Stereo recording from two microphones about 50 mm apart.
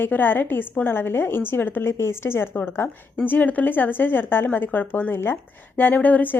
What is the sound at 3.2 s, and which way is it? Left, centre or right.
A woman's voice, left.